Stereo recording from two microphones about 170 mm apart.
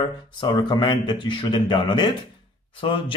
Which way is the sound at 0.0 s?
25° left (ahead or behind).